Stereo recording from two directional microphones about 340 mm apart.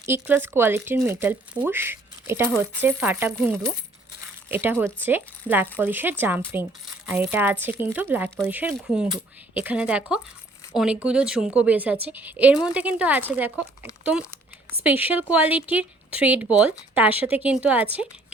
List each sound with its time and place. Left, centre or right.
0.0 s speech: centre